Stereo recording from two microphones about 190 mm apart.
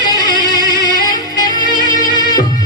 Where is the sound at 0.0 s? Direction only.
20° left (ahead or behind).